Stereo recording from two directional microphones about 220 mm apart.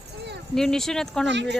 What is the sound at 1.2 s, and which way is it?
Speech, 55° right (ahead or behind).